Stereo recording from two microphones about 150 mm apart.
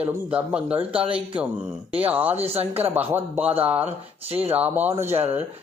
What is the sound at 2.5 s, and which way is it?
Speech, 40° right (ahead or behind).